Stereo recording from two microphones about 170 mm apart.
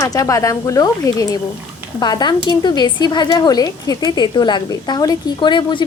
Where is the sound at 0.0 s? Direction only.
20° left (ahead or behind).